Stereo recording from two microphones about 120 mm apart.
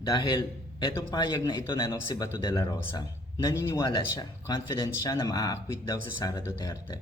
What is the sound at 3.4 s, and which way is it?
Speech, 25° left (ahead or behind).